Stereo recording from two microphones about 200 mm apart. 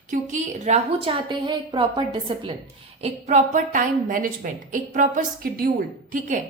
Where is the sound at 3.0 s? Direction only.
35° right (ahead or behind).